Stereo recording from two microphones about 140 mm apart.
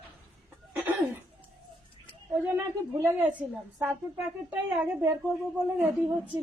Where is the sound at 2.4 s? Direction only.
15° right (ahead or behind).